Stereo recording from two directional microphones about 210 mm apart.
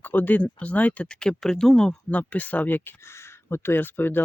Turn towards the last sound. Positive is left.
turn(degrees=10)  # may be behind; listen again after turning